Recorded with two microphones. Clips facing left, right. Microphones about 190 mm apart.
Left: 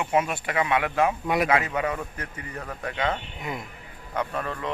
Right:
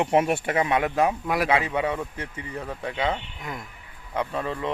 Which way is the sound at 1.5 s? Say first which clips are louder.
Right 1 dB; 25° right (ahead or behind).